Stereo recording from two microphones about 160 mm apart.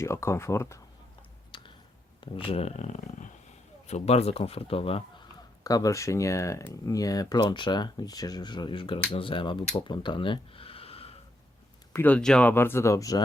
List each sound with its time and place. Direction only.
0.0 s speech: 15° left (ahead or behind)
1.5 s a sound: 30° left (ahead or behind)
2.2 s speech: 35° left (ahead or behind)
5.6 s speech: 20° left (ahead or behind); by 11.2 s 35° left (ahead or behind)
11.9 s speech: 10° left (ahead or behind)